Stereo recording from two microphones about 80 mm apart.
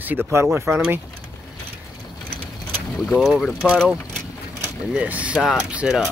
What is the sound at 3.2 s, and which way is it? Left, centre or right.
Speech, centre.